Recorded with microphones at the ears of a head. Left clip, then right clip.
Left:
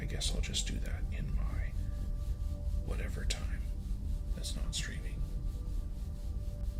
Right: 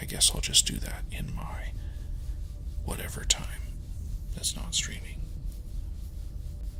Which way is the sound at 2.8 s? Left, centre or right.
Right.